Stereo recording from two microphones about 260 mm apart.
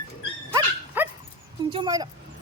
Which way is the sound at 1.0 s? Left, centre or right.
Centre.